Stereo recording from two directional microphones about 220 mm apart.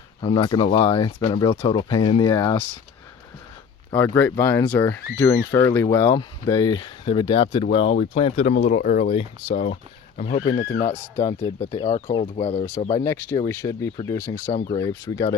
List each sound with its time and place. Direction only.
0.2 s speech: 20° left (ahead or behind)
3.9 s speech: 10° left (ahead or behind); by 8.5 s 25° left (ahead or behind)
8.5 s speech: 45° left (ahead or behind)
9.1 s speech: 25° left (ahead or behind)
13.1 s speech: 10° left (ahead or behind)